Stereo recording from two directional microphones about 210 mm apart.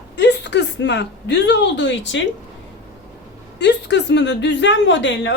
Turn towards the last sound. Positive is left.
turn(degrees=60)  # may be behind; listen again after turning